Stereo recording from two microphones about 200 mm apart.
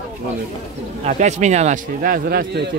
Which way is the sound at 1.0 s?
35° right (ahead or behind).